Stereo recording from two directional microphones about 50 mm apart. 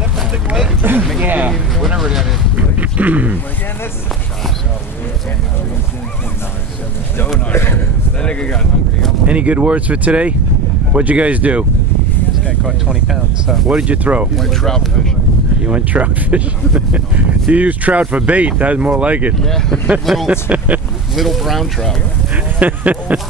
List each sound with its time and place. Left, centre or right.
0.8 s speech: right
1.2 s speech: right
2.5 s speech: right
8.2 s speech: centre
9.3 s speech: right
12.4 s speech: centre
14.3 s speech: centre
15.6 s speech: right
17.5 s speech: right
19.4 s speech: centre
20.2 s speech: right
21.1 s speech: centre
22.3 s speech: right